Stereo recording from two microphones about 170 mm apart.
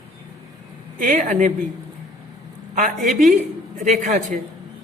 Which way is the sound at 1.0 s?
50° right (ahead or behind).